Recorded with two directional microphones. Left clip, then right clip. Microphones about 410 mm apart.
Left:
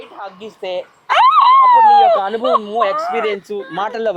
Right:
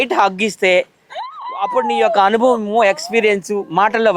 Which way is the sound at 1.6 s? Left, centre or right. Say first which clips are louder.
Left 8 dB; right.